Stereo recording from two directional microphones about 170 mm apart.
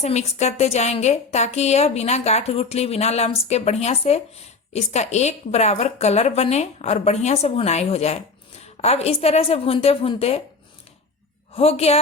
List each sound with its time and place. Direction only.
0.0 s a woman's voice: 40° left (ahead or behind)
11.5 s a woman's voice: 35° left (ahead or behind)